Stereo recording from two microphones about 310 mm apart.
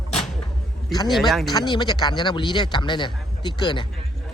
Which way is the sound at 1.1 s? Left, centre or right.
Centre.